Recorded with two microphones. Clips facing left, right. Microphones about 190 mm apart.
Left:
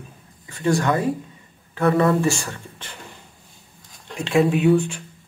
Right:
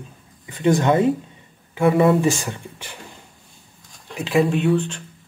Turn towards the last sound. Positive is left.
turn(degrees=10)  # may be behind; listen again after turning